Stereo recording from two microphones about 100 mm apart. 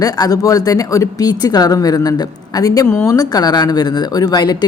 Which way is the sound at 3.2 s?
40° left (ahead or behind).